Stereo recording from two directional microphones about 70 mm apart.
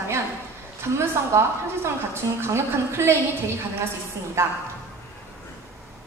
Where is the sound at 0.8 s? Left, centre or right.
Right.